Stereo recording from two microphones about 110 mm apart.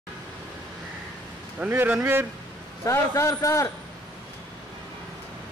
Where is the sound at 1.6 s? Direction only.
15° right (ahead or behind).